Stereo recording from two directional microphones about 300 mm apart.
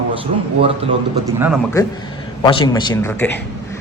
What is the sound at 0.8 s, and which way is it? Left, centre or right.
Speech, centre.